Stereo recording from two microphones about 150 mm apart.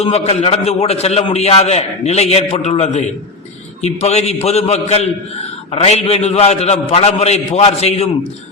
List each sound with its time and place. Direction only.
0.0 s a man's voice: 45° left (ahead or behind)